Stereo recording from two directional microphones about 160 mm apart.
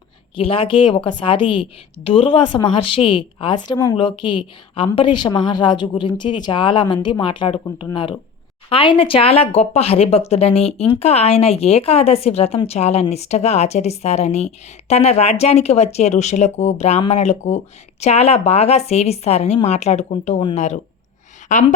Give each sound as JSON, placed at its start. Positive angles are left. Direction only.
{"t": 0.3, "sound": "speech", "side_deg": 35}